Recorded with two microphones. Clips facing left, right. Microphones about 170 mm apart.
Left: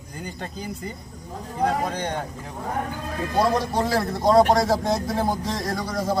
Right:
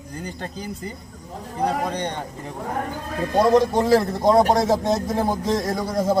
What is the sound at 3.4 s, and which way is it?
A man's voice, 20° right (ahead or behind).